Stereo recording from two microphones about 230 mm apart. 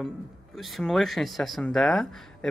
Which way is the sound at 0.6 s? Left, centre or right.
Centre.